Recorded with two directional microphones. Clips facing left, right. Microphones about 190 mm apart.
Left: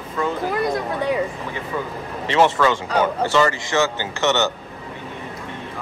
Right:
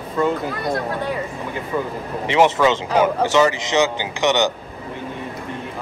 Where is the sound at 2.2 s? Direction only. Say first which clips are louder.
Right 1 dB; 15° right (ahead or behind).